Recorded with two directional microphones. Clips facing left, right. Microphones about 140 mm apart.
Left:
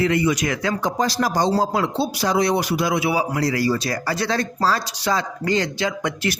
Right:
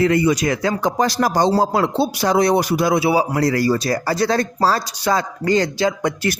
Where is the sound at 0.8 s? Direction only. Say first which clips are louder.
Right 3 dB; 55° right (ahead or behind).